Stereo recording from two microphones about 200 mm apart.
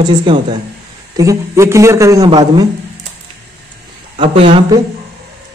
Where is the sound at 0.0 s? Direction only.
25° right (ahead or behind).